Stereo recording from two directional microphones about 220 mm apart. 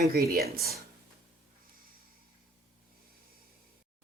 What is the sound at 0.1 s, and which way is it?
Speech, 45° right (ahead or behind).